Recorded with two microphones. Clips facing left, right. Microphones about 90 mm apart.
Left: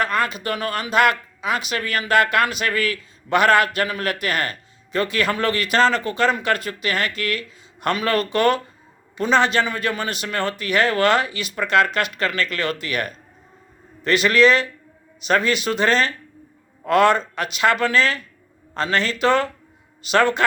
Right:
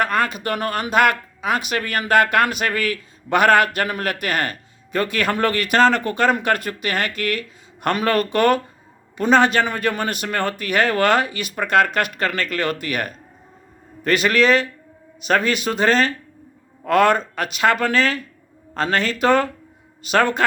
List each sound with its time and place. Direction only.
0.0 s a man's voice: 45° right (ahead or behind)